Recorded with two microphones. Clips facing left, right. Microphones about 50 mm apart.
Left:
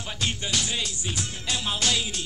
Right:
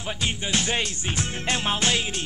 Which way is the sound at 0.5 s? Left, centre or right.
Right.